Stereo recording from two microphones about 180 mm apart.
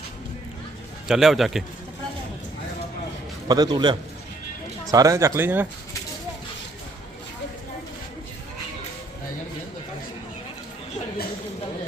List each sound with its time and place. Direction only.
1.0 s a man's voice: centre (ahead or behind)
3.5 s a man's voice: 20° right (ahead or behind)